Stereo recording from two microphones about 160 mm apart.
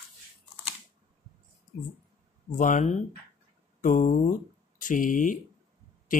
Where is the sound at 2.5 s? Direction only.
55° left (ahead or behind).